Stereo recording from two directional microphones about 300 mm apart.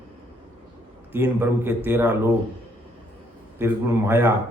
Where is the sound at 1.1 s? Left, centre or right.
Centre.